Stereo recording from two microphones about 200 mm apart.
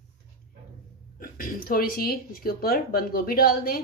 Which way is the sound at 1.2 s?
45° left (ahead or behind).